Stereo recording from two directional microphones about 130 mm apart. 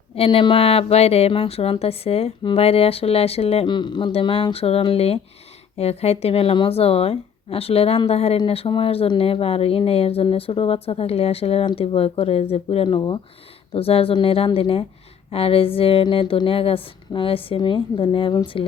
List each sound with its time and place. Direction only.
0.2 s speech: 40° left (ahead or behind)